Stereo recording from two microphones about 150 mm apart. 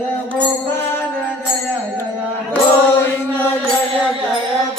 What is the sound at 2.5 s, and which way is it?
Chant, 10° left (ahead or behind).